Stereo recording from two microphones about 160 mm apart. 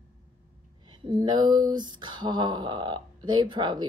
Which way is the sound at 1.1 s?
25° right (ahead or behind).